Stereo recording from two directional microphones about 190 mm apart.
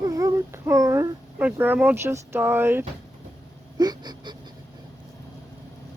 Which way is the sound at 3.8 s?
20° right (ahead or behind).